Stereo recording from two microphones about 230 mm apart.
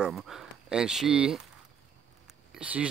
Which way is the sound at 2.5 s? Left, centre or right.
Centre.